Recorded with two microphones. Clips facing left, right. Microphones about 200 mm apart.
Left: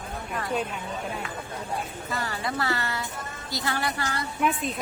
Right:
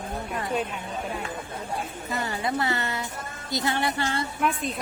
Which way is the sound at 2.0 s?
20° right (ahead or behind).